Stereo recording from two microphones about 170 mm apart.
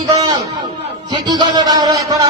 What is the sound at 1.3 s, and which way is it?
Speech, 25° right (ahead or behind).